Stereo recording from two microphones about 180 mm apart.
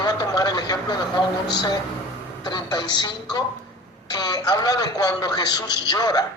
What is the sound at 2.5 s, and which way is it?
Speech, 25° left (ahead or behind).